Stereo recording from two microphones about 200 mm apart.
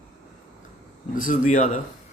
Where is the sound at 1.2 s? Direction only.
40° left (ahead or behind).